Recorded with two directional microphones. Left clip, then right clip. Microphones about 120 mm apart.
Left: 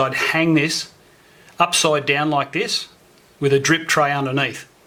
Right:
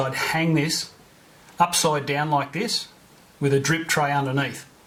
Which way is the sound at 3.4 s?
20° left (ahead or behind).